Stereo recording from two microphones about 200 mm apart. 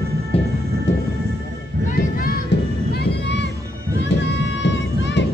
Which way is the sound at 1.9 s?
45° left (ahead or behind).